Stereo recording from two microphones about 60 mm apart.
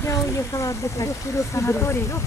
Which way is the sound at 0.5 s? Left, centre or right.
Left.